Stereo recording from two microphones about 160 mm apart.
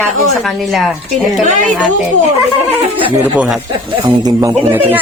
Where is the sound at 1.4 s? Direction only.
50° right (ahead or behind).